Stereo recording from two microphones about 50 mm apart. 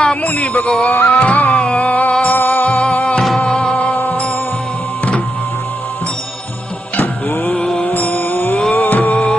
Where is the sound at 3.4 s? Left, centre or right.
Centre.